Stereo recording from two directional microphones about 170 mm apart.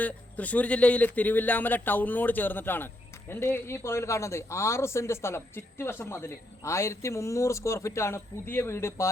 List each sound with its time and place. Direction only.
0.0 s a man's voice: 10° left (ahead or behind)